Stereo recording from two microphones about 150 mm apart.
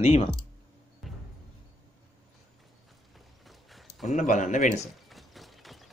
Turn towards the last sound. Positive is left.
turn(degrees=0)  # may be behind; listen again after turning